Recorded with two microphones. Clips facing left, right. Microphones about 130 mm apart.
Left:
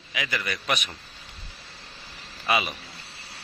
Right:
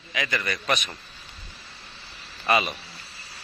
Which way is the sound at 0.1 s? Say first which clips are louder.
Right 2 dB; 10° left (ahead or behind).